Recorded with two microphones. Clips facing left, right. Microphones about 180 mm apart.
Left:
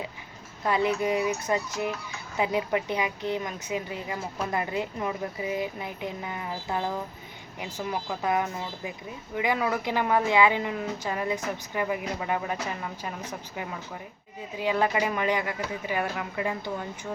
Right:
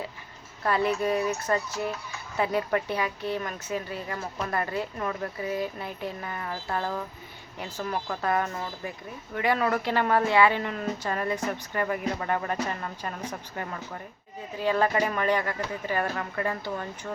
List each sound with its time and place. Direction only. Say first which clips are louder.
0.6 s speech: even; 15° left (ahead or behind)
14.5 s speech: right 1 dB; 15° left (ahead or behind)